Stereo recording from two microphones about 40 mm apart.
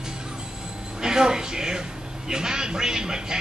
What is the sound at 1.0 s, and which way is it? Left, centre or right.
Speech, centre.